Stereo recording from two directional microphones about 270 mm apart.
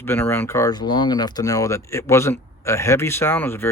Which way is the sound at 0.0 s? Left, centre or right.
Centre.